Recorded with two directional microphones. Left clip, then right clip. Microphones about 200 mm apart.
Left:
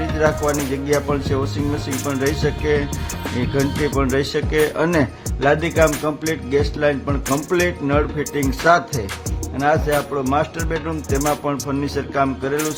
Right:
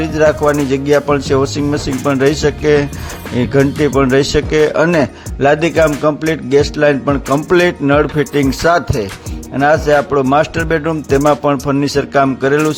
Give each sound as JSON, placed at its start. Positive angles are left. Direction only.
{"t": 0.0, "sound": "speech", "side_deg": -35}